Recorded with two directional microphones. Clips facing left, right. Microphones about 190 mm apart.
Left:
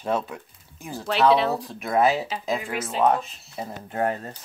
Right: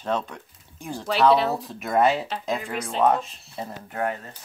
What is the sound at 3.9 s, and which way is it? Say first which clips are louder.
Speech: left 3 dB; 35° left (ahead or behind).